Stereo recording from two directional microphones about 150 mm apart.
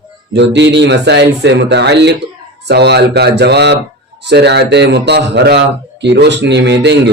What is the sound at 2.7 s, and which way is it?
A man's voice, 90° right.